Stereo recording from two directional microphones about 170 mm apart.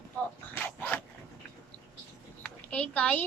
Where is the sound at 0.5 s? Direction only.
10° left (ahead or behind).